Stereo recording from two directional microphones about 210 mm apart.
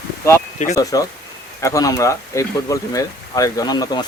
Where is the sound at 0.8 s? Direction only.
15° left (ahead or behind).